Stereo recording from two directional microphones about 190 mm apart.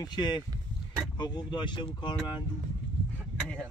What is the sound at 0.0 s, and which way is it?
Speech, 20° left (ahead or behind).